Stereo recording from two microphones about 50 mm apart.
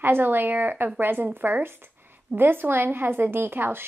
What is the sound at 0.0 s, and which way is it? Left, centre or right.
A woman's voice, right.